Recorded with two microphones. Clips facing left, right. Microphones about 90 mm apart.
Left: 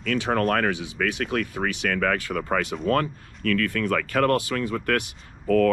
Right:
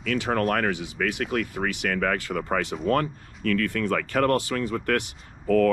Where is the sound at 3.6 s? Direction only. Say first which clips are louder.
Left 1 dB; 30° right (ahead or behind).